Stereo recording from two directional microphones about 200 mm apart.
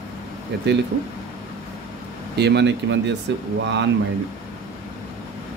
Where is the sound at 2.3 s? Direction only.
55° right (ahead or behind).